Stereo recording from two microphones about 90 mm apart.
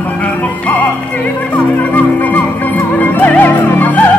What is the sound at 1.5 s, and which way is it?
Music, 15° left (ahead or behind).